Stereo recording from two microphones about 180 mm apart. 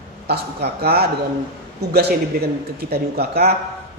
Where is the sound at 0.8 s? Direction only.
60° right (ahead or behind).